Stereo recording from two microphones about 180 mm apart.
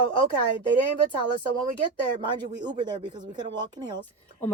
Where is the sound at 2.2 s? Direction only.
25° right (ahead or behind).